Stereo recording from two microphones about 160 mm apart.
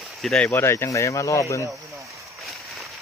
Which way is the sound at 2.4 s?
Centre (ahead or behind).